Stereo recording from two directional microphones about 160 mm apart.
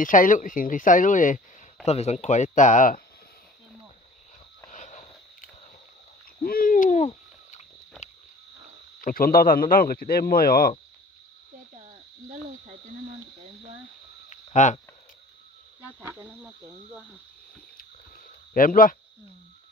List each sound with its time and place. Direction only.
0.0 s speech: 55° left (ahead or behind)
1.9 s speech: 40° left (ahead or behind)
4.6 s a sound: 50° left (ahead or behind)
6.4 s owl: 65° left (ahead or behind); by 7.6 s 45° left (ahead or behind)
9.0 s a man's voice: 65° left (ahead or behind)
14.3 s a sound: 50° left (ahead or behind)
16.0 s speech: 15° right (ahead or behind)
18.5 s speech: 60° left (ahead or behind)